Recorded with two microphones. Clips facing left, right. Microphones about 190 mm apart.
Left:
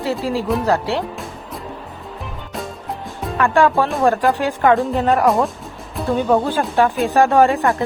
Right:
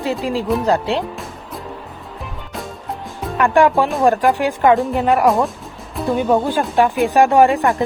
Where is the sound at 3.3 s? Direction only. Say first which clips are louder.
Right 2 dB; 15° right (ahead or behind).